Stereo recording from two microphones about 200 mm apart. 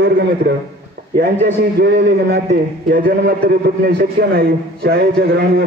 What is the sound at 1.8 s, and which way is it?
A man's voice, 60° right (ahead or behind).